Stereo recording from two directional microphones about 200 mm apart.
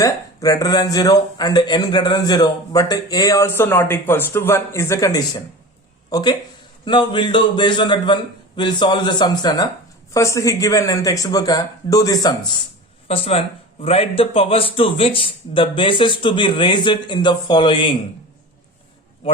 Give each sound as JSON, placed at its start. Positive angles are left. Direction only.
{"t": 0.0, "sound": "a man's voice", "side_deg": 15}
{"t": 13.1, "sound": "a man's voice", "side_deg": 30}